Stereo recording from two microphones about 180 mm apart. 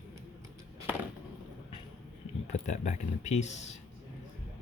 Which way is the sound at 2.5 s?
40° left (ahead or behind).